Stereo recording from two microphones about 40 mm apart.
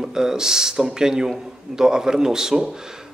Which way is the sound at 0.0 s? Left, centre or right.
Centre.